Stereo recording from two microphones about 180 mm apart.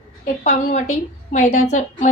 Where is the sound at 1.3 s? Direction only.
40° left (ahead or behind).